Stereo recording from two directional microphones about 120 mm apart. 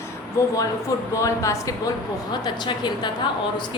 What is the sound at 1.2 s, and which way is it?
Speech, 25° left (ahead or behind).